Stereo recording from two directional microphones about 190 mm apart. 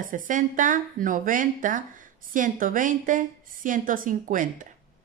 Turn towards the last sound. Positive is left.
turn(degrees=-45)  # may be behind; listen again after turning